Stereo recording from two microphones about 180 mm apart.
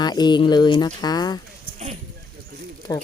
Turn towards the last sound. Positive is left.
turn(degrees=20)  # may be behind; listen again after turning